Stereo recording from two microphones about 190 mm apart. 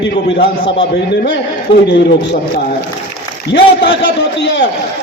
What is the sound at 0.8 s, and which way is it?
A man's voice, 65° left (ahead or behind).